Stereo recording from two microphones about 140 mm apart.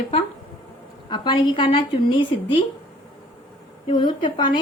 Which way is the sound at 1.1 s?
35° left (ahead or behind).